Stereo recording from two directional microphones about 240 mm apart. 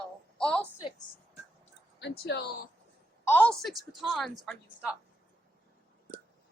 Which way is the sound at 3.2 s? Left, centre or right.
Centre.